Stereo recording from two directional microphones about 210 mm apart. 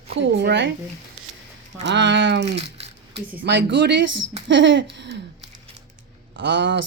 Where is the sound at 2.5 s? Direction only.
30° right (ahead or behind).